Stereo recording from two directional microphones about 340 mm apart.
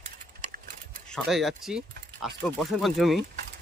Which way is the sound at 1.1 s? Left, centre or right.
Centre.